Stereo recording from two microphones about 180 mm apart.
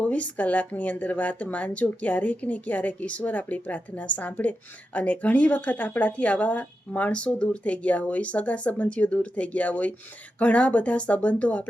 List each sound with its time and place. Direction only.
0.0 s speech: 10° left (ahead or behind)